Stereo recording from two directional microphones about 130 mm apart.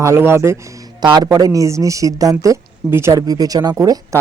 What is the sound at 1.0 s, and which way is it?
Speech, 40° right (ahead or behind).